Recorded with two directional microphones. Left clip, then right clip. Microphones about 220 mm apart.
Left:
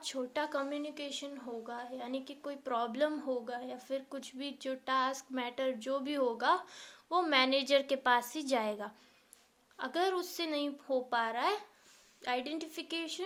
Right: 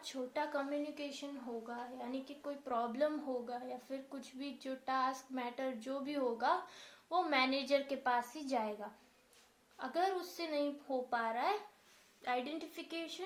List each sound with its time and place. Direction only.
0.0 s a woman's voice: 40° left (ahead or behind)